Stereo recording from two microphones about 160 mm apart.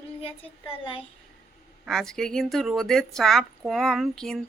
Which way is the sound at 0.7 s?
35° left (ahead or behind).